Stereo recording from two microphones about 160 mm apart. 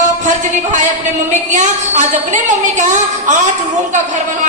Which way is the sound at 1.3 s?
50° right (ahead or behind).